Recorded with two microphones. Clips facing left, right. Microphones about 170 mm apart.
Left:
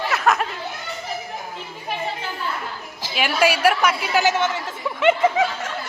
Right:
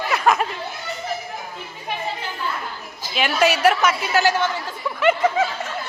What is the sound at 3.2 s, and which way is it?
A woman's voice, 10° left (ahead or behind).